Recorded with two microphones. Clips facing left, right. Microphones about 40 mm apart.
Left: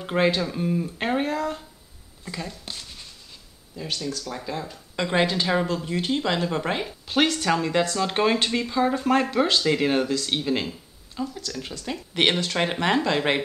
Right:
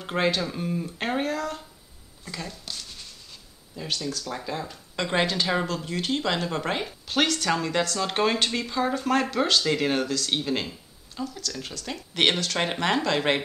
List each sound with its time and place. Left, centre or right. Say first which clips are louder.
0.0 s speech: left 3 dB; centre
2.6 s speech: left 1 dB; centre
3.7 s speech: left 1 dB; centre